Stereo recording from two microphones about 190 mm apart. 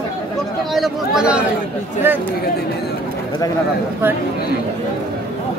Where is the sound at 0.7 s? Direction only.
Centre (ahead or behind).